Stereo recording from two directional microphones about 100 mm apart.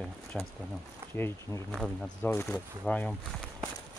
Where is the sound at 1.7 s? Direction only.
5° left (ahead or behind).